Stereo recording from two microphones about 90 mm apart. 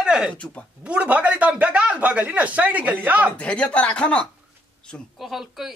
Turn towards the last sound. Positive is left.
turn(degrees=0)  # may be behind; listen again after turning